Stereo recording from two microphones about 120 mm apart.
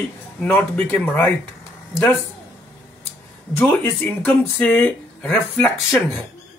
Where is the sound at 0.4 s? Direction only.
10° left (ahead or behind).